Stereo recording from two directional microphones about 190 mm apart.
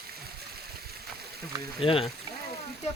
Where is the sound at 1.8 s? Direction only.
30° left (ahead or behind).